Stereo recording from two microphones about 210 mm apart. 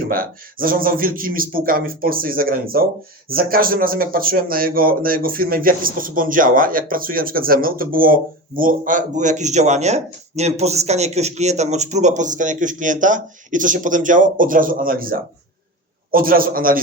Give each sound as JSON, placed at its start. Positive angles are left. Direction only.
{"t": 0.1, "sound": "a man's voice", "side_deg": -40}